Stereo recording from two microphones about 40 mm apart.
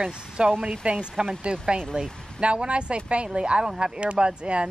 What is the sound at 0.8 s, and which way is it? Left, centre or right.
Speech, right.